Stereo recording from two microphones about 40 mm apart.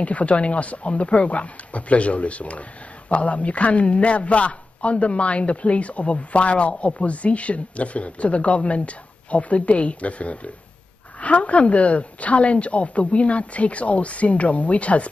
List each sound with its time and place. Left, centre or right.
0.0 s a woman's voice: left